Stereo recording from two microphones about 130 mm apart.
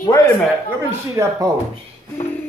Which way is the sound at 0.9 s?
25° right (ahead or behind).